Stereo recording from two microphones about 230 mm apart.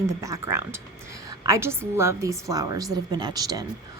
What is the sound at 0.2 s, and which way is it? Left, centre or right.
A woman's voice, centre.